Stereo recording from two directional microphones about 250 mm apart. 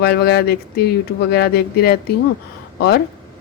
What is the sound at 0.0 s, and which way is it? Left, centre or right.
Speech, left.